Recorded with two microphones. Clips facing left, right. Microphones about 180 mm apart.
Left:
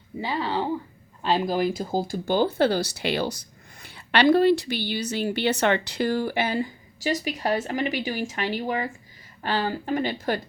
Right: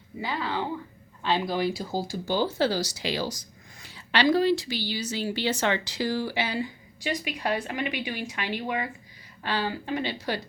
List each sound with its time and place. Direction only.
0.2 s a woman's voice: 30° left (ahead or behind); by 10.4 s 50° left (ahead or behind)